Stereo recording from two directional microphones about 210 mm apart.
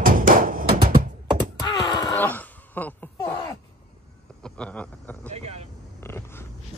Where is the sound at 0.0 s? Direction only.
40° right (ahead or behind).